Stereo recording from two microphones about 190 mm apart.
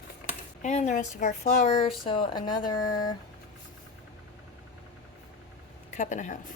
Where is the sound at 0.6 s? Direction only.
40° left (ahead or behind); by 3.1 s 20° left (ahead or behind).